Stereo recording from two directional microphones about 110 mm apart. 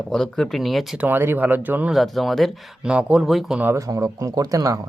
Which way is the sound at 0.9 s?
20° right (ahead or behind).